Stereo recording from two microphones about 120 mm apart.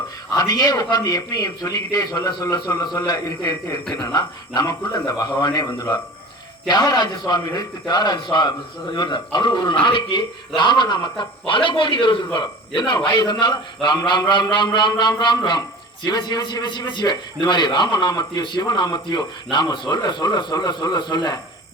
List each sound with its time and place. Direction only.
0.3 s a man's voice: 35° left (ahead or behind)